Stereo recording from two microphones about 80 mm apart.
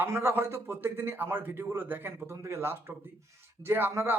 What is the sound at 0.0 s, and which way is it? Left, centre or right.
A man's voice, right.